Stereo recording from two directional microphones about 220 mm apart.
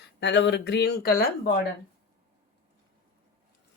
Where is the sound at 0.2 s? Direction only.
50° left (ahead or behind).